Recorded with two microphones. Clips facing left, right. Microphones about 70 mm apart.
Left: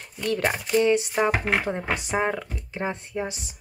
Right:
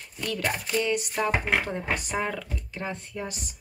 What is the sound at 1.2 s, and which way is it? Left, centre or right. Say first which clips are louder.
Speech: left 3 dB; left.